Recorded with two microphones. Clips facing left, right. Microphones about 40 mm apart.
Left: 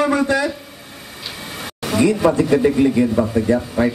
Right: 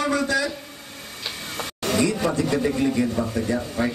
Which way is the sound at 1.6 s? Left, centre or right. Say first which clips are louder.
Left 4 dB; centre.